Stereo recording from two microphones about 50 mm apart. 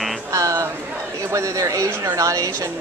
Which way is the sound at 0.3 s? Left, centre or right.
Right.